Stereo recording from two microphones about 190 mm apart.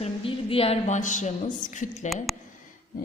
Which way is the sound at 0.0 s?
30° left (ahead or behind).